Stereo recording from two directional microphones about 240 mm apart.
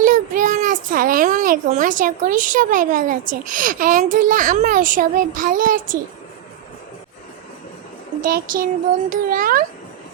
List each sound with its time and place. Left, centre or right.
0.0 s a child's voice: right
8.2 s a child's voice: right